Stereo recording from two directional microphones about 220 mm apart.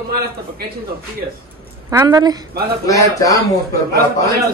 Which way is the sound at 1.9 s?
15° right (ahead or behind).